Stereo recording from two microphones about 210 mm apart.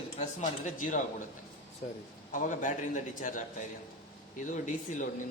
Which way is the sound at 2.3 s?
40° left (ahead or behind).